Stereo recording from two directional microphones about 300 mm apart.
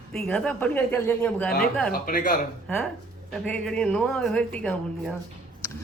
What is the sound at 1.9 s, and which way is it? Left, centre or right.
Speech, left.